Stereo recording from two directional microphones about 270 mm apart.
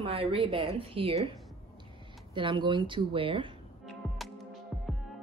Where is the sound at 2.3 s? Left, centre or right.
Centre.